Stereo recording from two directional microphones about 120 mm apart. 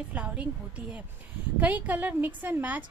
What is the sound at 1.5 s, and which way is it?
A woman's voice, 15° right (ahead or behind).